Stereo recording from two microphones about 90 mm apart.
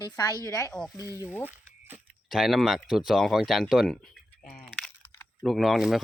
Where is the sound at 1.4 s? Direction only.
20° right (ahead or behind).